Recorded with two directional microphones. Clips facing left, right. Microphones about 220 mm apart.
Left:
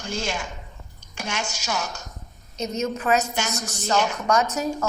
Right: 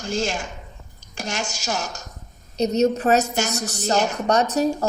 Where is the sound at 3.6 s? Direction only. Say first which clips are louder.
Right 4 dB; 70° right (ahead or behind).